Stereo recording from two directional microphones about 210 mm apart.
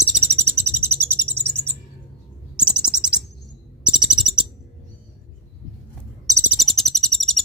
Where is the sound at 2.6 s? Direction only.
5° right (ahead or behind).